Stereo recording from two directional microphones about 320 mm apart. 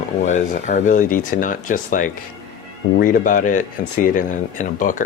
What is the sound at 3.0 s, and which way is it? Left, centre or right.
Speech, left.